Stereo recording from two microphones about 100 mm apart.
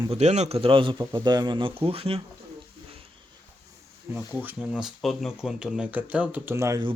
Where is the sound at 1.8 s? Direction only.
65° right (ahead or behind).